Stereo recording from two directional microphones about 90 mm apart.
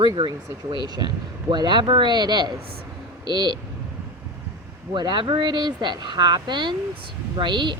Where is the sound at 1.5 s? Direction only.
55° right (ahead or behind).